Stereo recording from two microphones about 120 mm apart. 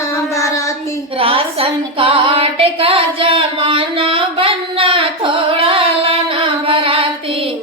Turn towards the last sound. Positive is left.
turn(degrees=-50)  # may be behind; listen again after turning